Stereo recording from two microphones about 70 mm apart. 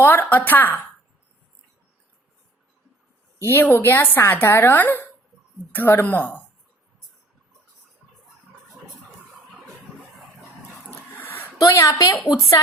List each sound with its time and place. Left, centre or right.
0.0 s a woman's voice: left
3.4 s a woman's voice: left
11.1 s a sound: left
11.6 s a woman's voice: left